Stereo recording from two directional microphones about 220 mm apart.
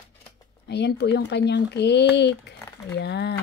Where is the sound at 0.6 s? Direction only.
50° left (ahead or behind).